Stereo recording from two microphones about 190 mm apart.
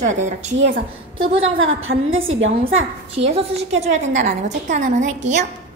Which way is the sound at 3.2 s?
30° right (ahead or behind).